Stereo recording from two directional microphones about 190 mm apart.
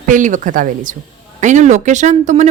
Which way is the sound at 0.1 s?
40° right (ahead or behind).